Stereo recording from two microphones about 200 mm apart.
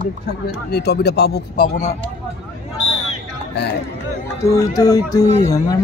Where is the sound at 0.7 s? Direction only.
55° left (ahead or behind).